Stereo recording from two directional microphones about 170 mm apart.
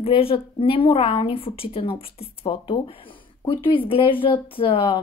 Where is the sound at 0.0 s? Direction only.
35° left (ahead or behind).